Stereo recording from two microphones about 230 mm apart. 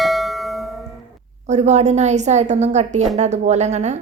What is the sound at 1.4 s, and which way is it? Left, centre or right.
A woman's voice, right.